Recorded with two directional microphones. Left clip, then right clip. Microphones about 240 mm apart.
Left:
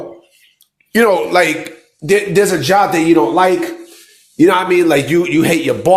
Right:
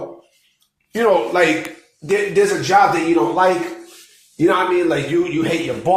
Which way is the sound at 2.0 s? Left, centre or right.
Left.